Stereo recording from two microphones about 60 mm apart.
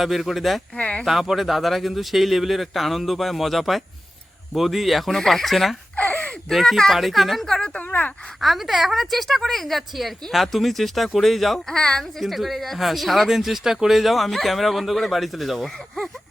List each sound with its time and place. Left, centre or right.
0.0 s speech: centre
0.8 s speech: left
1.0 s speech: centre
6.0 s gasp: left
6.5 s speech: centre
7.7 s speech: left
8.4 s speech: centre
12.2 s speech: centre